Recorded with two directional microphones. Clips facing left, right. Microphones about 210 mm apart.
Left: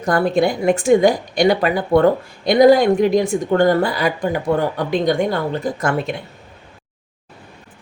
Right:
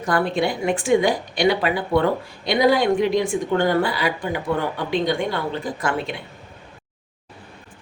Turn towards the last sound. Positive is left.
turn(degrees=45)  # may be behind; listen again after turning